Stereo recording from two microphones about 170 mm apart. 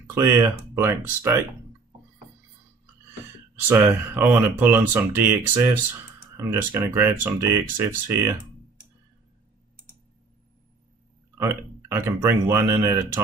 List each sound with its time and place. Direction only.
0.0 s speech: 15° right (ahead or behind)
3.5 s speech: 10° right (ahead or behind)
11.3 s speech: 15° right (ahead or behind)